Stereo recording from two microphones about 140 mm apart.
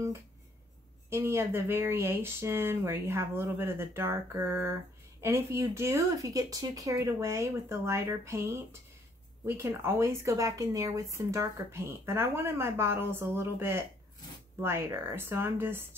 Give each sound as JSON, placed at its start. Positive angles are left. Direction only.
{"t": 1.1, "sound": "speech", "side_deg": -20}